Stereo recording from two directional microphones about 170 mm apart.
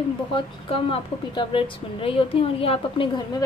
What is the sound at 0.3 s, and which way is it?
Speech, 30° left (ahead or behind).